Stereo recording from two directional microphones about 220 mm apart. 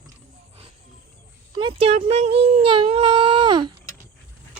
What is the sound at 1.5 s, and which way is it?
Speech, 25° right (ahead or behind).